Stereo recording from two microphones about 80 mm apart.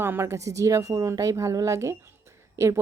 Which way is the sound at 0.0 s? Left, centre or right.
Right.